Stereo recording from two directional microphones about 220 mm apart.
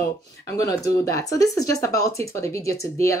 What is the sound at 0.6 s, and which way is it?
Speech, 15° left (ahead or behind).